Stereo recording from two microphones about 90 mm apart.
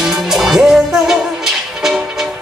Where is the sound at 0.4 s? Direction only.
5° right (ahead or behind).